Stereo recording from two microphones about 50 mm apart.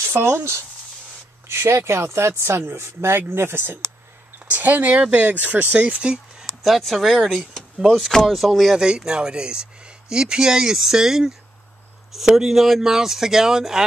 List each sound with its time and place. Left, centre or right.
0.0 s speech: right
4.5 s speech: right
6.4 s speech: centre
7.5 s a sound: centre
8.3 s speech: centre